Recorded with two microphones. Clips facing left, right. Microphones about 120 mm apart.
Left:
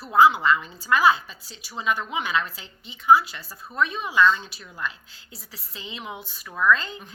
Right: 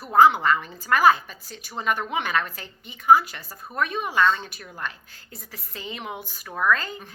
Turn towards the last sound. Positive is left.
turn(degrees=-45)  # may be behind; listen again after turning